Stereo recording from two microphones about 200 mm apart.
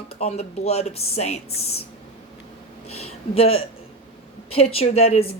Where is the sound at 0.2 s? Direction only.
30° left (ahead or behind).